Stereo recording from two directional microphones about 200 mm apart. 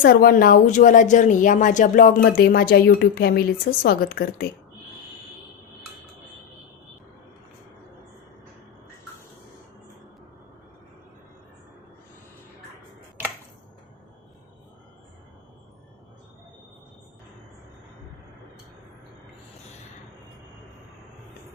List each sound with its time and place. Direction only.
0.0 s speech: 50° left (ahead or behind)